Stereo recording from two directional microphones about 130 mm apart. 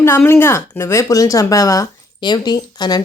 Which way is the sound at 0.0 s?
20° left (ahead or behind).